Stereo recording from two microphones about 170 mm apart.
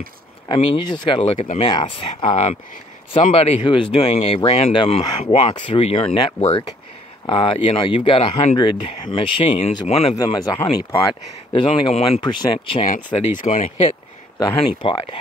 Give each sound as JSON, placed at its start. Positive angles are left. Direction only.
{"t": 0.5, "sound": "speech", "side_deg": 25}
{"t": 10.1, "sound": "speech", "side_deg": 20}
{"t": 12.8, "sound": "speech", "side_deg": 50}
{"t": 14.4, "sound": "speech", "side_deg": 30}